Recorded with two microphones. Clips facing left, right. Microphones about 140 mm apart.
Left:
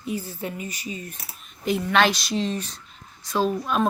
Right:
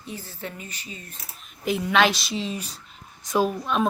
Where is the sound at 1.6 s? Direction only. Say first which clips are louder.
Even; centre (ahead or behind).